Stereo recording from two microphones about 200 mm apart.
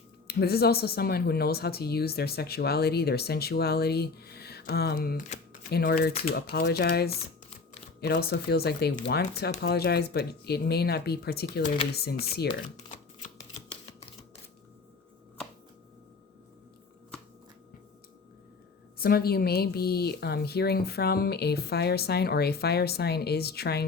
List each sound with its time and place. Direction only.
0.3 s speech: 50° left (ahead or behind)
13.2 s shuffling cards: 35° left (ahead or behind)
18.9 s speech: 50° left (ahead or behind)